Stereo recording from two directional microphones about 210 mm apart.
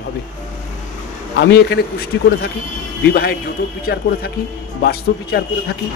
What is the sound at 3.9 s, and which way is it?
Speech, 50° left (ahead or behind).